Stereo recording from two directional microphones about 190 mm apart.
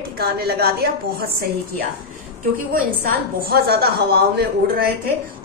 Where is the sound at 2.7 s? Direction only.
50° right (ahead or behind).